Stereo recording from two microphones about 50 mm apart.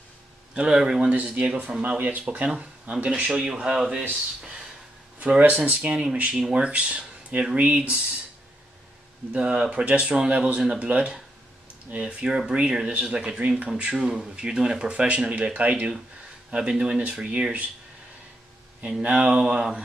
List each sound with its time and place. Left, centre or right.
0.6 s speech: centre
1.0 s speech: right
5.4 s speech: right
9.3 s speech: right
16.5 s speech: centre
18.8 s speech: right